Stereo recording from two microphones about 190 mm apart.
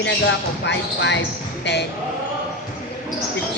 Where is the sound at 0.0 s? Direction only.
65° left (ahead or behind).